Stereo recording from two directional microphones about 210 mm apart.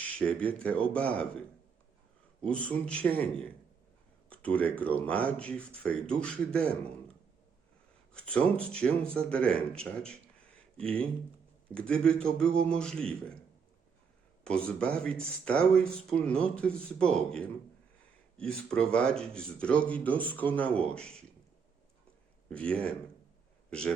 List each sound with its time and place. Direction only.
0.0 s speech: 5° left (ahead or behind)
2.4 s speech: 5° left (ahead or behind)
4.3 s speech: 5° left (ahead or behind)
8.1 s speech: 5° left (ahead or behind)
14.4 s speech: 5° left (ahead or behind)
22.4 s a man's voice: 5° left (ahead or behind)